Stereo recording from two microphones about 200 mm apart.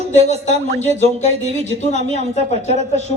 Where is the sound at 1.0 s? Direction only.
35° left (ahead or behind).